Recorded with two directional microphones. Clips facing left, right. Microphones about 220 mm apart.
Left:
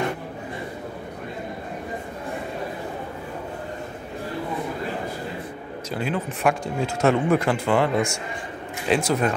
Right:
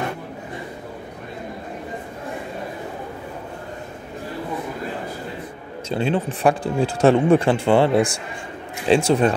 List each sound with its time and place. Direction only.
5.9 s speech: 30° right (ahead or behind)